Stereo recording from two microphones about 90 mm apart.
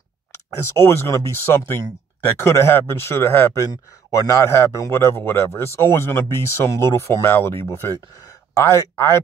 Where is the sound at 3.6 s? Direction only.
40° left (ahead or behind).